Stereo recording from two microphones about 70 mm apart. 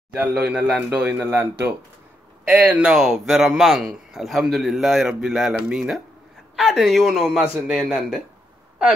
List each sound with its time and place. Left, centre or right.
0.2 s a man's voice: centre; by 1.7 s right
2.7 s a man's voice: centre
3.0 s a man's voice: centre